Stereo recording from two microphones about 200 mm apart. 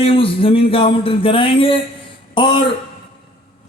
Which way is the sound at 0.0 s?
25° left (ahead or behind).